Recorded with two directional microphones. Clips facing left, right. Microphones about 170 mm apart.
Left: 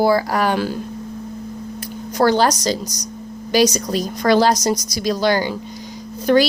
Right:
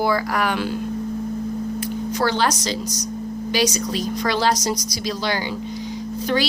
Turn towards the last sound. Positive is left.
turn(degrees=50)  # may be behind; listen again after turning